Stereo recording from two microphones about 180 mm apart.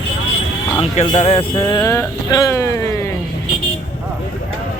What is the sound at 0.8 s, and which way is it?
Speech, 30° left (ahead or behind).